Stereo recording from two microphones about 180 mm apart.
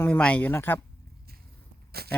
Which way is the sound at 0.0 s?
5° left (ahead or behind).